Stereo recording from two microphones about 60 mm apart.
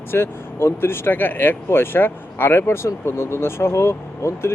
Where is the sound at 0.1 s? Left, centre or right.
Left.